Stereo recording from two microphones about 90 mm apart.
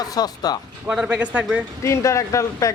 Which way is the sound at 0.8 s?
10° right (ahead or behind).